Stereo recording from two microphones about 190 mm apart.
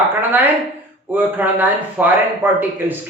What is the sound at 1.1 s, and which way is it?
A man's voice, 10° right (ahead or behind).